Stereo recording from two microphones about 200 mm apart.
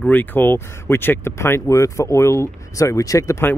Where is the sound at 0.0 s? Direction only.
10° left (ahead or behind).